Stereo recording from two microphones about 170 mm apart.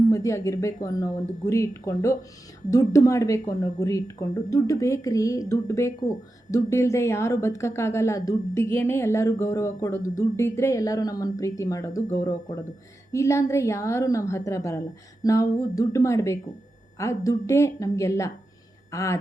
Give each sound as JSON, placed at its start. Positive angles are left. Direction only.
{"t": 0.1, "sound": "a woman's voice", "side_deg": 20}